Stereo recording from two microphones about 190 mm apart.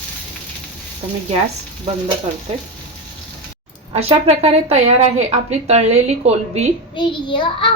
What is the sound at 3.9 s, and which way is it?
A woman's voice, 30° right (ahead or behind).